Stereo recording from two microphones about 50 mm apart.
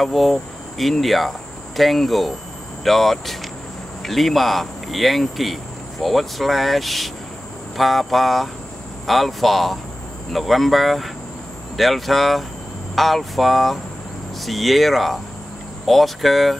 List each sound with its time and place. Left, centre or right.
0.0 s speech: centre